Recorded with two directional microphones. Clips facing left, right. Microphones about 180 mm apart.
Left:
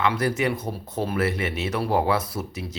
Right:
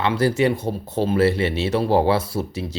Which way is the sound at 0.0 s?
30° right (ahead or behind).